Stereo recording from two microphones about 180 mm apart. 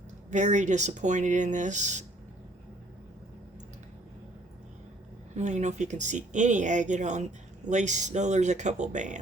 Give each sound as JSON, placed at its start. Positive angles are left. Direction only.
{"t": 0.3, "sound": "speech", "side_deg": -40}
{"t": 5.4, "sound": "speech", "side_deg": -40}